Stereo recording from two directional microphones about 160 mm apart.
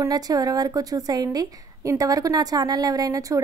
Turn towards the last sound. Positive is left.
turn(degrees=-20)  # may be behind; listen again after turning